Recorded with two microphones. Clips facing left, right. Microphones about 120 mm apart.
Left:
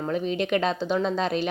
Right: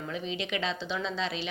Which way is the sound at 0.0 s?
50° left (ahead or behind).